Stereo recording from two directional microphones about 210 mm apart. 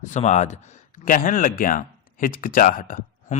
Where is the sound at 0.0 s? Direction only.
35° left (ahead or behind).